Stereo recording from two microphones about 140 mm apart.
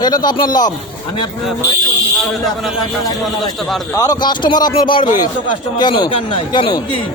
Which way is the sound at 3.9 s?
25° left (ahead or behind).